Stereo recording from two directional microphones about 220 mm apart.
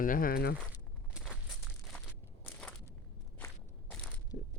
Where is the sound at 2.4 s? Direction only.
10° left (ahead or behind).